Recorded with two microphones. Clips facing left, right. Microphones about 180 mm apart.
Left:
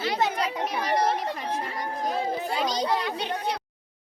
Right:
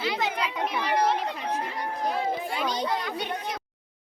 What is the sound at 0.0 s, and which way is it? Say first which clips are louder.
Chatter: left 2 dB; 40° left (ahead or behind).